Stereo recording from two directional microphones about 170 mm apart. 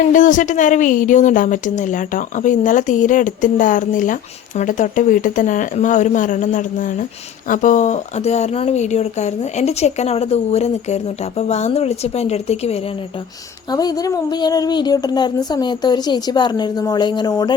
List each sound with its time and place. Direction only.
0.1 s a woman's voice: 50° left (ahead or behind)
13.7 s speech: 20° left (ahead or behind)